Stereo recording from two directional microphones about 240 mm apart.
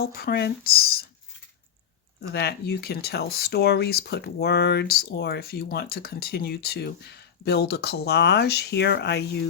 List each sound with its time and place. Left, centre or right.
0.0 s speech: left
2.3 s speech: left